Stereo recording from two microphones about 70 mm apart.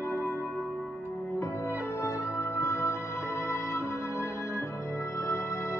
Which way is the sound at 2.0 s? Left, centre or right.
Left.